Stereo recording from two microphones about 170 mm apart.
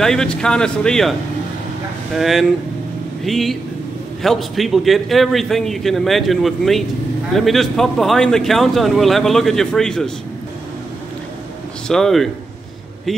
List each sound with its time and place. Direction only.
0.0 s speech: 5° left (ahead or behind)
2.1 s speech: centre (ahead or behind)
11.9 s speech: centre (ahead or behind)